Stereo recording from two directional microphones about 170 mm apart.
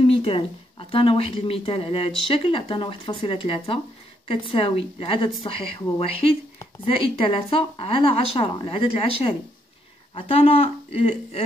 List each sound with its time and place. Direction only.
0.0 s speech: 35° left (ahead or behind)